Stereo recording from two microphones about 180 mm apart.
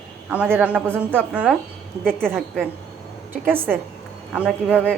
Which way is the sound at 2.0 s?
5° left (ahead or behind).